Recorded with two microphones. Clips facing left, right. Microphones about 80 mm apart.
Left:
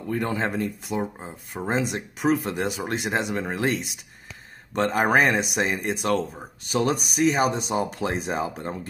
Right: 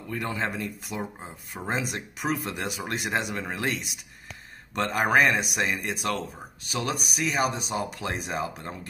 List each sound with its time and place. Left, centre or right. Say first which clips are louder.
0.1 s speech: left 4 dB; left